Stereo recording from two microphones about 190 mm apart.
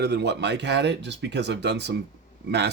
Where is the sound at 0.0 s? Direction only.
60° right (ahead or behind).